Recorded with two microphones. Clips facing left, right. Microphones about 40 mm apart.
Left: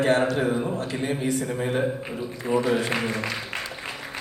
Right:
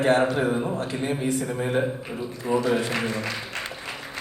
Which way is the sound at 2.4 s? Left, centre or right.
Left.